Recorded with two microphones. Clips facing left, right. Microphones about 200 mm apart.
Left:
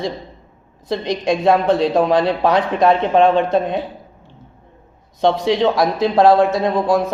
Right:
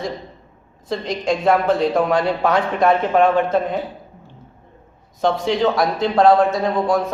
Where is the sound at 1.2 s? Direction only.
15° left (ahead or behind).